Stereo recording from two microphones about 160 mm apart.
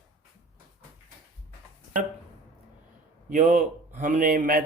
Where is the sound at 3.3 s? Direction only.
55° right (ahead or behind).